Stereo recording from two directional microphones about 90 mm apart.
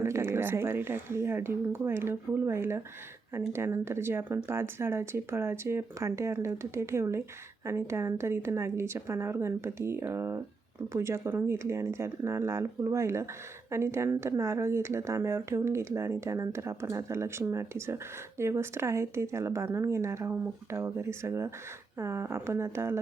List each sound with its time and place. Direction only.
0.0 s speech: 30° right (ahead or behind)